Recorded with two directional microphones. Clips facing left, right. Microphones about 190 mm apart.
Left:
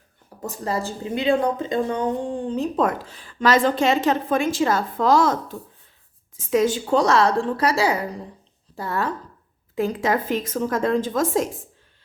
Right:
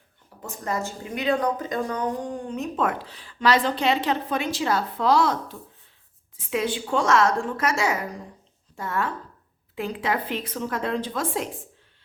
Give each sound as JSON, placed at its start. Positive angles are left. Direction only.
{"t": 0.4, "sound": "a woman's voice", "side_deg": 35}